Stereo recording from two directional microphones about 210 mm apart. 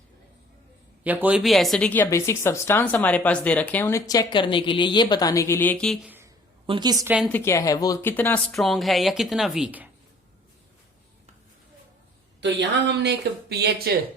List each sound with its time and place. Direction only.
1.0 s speech: 5° right (ahead or behind)
6.7 s a woman's voice: 20° right (ahead or behind)
7.3 s speech: 10° left (ahead or behind); by 9.9 s 5° right (ahead or behind)
12.4 s speech: 55° right (ahead or behind)